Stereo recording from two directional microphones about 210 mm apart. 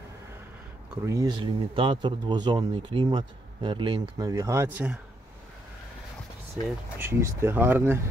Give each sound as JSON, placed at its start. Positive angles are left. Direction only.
{"t": 0.8, "sound": "speech", "side_deg": -15}
{"t": 7.0, "sound": "speech", "side_deg": -15}